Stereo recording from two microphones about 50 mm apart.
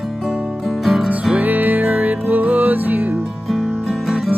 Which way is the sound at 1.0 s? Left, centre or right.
Centre.